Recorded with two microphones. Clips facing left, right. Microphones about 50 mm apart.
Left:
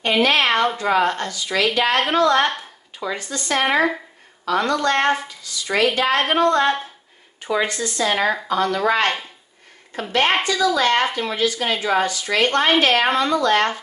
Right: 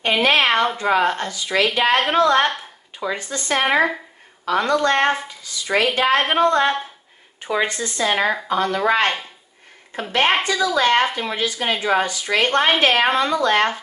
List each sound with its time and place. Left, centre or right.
0.0 s a sound: right
0.7 s a woman's voice: centre
3.6 s a woman's voice: centre
4.5 s a woman's voice: right
10.4 s a woman's voice: right